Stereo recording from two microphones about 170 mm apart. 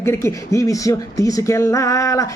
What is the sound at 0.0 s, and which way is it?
Speech, 15° left (ahead or behind).